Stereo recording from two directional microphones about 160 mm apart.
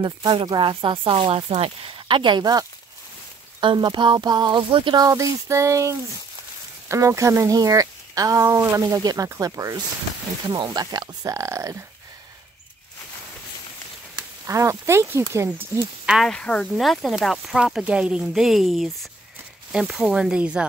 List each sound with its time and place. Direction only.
0.0 s speech: 30° right (ahead or behind)
3.6 s speech: 30° right (ahead or behind)
14.4 s speech: 20° right (ahead or behind)
16.2 s speech: 5° left (ahead or behind)